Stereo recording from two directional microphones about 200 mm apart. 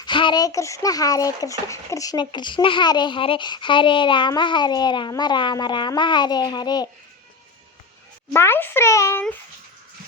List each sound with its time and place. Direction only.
0.0 s speech: 25° left (ahead or behind)
8.3 s a child's voice: 10° left (ahead or behind)